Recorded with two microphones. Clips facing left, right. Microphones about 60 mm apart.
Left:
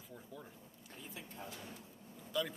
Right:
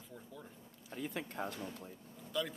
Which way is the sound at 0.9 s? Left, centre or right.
Right.